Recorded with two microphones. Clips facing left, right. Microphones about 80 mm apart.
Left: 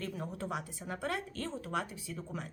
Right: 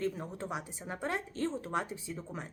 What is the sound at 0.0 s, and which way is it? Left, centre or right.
Speech, right.